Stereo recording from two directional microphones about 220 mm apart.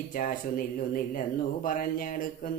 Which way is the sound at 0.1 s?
40° left (ahead or behind).